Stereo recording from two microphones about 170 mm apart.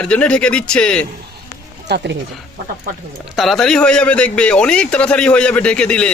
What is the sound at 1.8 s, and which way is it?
Speech, 80° right.